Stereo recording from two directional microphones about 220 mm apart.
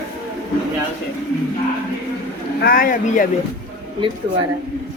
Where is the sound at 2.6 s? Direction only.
40° left (ahead or behind).